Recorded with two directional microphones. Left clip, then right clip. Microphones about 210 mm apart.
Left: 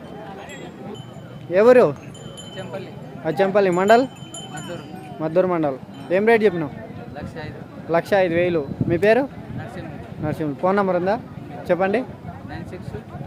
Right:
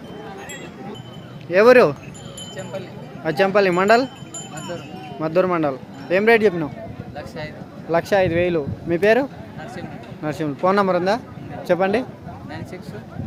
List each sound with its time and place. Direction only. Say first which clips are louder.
1.5 s speech: right 1 dB; centre (ahead or behind)
3.2 s speech: right 1 dB; centre (ahead or behind)
5.2 s speech: right 1 dB; centre (ahead or behind)
7.2 s a sound: right 3 dB; 30° right (ahead or behind)
7.9 s speech: even; centre (ahead or behind)